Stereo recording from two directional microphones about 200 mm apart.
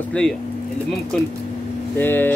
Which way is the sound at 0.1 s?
5° left (ahead or behind).